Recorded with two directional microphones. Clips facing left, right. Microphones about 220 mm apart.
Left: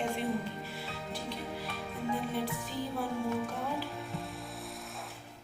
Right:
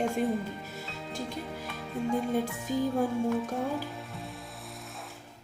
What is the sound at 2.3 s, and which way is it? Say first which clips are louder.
Music: right 5 dB; 45° right (ahead or behind).